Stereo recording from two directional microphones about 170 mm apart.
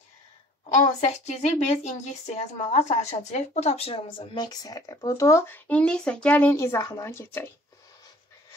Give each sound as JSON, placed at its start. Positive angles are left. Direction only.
{"t": 1.0, "sound": "speech", "side_deg": 40}